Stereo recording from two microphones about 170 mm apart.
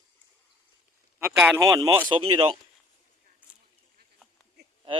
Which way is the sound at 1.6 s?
20° right (ahead or behind).